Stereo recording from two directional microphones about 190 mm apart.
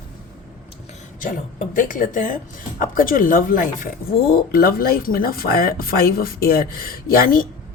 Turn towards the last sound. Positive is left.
turn(degrees=50)  # may be behind; listen again after turning